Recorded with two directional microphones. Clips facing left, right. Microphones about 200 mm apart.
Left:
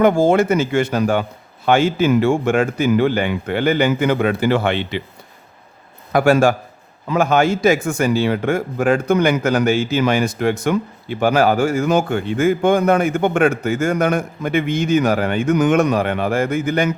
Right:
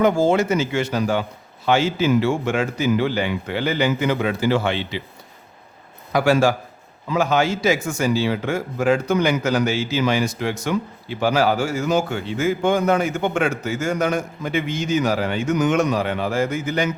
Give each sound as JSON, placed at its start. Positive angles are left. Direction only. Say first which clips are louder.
{"t": 0.0, "sound": "speech", "louder": "left 3 dB", "side_deg": 55}
{"t": 6.1, "sound": "speech", "louder": "left 3 dB", "side_deg": 50}